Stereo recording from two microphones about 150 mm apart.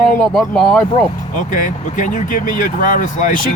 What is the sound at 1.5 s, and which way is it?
Speech, 60° left (ahead or behind).